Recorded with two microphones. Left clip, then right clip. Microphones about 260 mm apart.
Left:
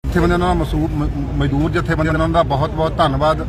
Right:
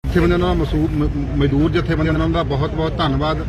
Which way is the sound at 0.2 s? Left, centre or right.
Centre.